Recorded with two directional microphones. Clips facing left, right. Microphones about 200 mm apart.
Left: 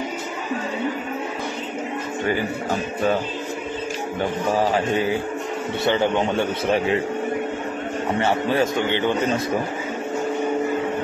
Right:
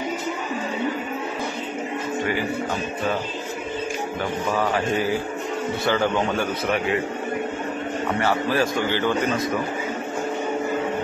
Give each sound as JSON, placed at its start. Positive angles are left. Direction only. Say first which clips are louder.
{"t": 4.5, "sound": "a man's voice", "louder": "left 2 dB", "side_deg": 30}
{"t": 8.2, "sound": "a man's voice", "louder": "left 2 dB", "side_deg": 25}